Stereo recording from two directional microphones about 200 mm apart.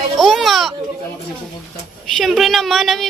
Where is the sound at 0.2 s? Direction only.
Centre (ahead or behind).